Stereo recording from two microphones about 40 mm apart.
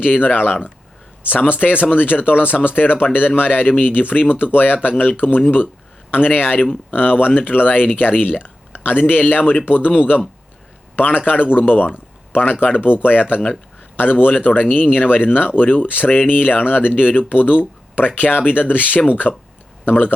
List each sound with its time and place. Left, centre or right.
0.0 s speech: left